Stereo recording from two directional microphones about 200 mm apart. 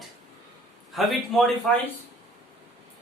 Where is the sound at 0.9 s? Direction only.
Centre (ahead or behind).